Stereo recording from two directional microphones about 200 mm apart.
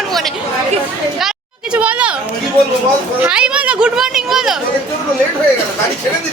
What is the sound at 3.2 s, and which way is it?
Speech, 5° right (ahead or behind).